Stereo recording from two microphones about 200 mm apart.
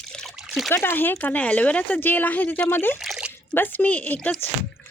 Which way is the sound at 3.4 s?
10° left (ahead or behind).